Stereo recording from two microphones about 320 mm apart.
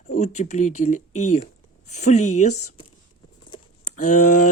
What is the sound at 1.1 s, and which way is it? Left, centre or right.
Speech, left.